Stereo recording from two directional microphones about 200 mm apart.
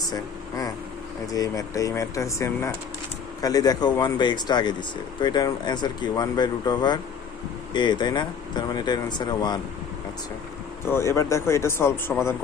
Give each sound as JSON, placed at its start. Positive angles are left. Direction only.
{"t": 1.3, "sound": "speech", "side_deg": 15}
{"t": 10.9, "sound": "speech", "side_deg": 15}